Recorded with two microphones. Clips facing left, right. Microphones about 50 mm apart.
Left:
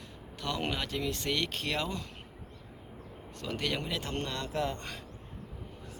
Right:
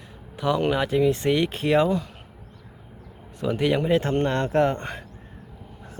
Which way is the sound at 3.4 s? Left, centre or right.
Centre.